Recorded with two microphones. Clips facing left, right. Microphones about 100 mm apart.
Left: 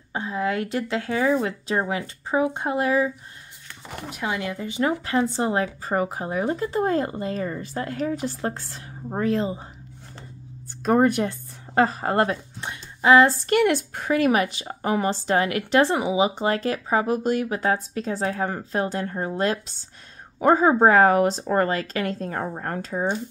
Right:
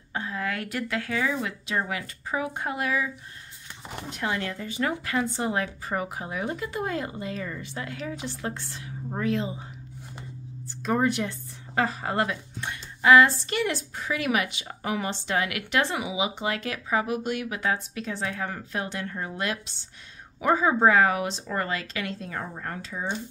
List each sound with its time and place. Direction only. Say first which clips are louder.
0.1 s speech: left 5 dB; 20° left (ahead or behind)
4.1 s speech: left 2 dB; 5° left (ahead or behind); by 9.6 s 40° left (ahead or behind)
10.8 s a woman's voice: left 6 dB; 50° left (ahead or behind)
12.5 s a sound: left 1 dB; 25° left (ahead or behind)
13.3 s speech: left 8 dB; 50° left (ahead or behind)